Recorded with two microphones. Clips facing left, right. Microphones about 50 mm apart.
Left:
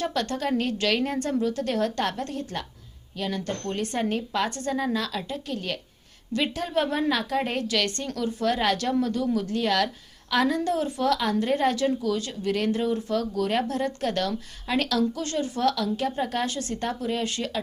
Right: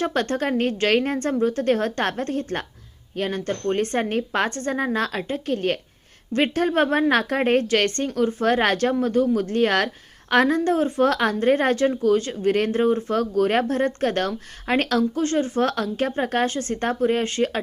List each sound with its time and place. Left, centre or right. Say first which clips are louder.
0.0 s a woman's voice: right 4 dB; right